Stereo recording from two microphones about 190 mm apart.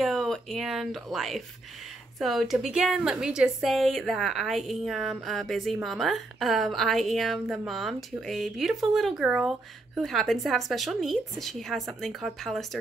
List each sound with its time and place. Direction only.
0.0 s a woman's voice: centre (ahead or behind)